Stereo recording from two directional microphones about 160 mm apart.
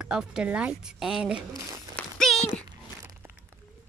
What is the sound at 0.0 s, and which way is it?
A woman's voice, 5° right (ahead or behind).